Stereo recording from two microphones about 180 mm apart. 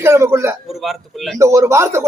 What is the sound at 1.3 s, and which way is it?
Speech, 15° right (ahead or behind).